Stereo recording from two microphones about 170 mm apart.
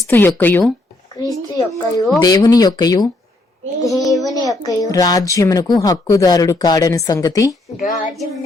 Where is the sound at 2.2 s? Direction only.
20° left (ahead or behind).